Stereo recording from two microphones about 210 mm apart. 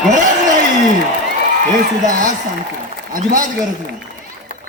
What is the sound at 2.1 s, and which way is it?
A man's voice, 40° right (ahead or behind).